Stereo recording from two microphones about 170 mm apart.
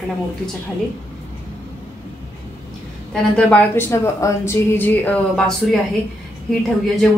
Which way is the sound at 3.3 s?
10° left (ahead or behind).